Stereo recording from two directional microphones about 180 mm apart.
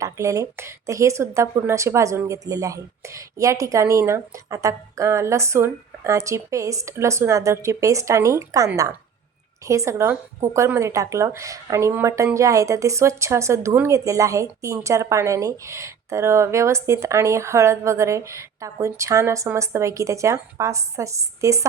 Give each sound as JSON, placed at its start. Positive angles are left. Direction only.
{"t": 0.0, "sound": "speech", "side_deg": -15}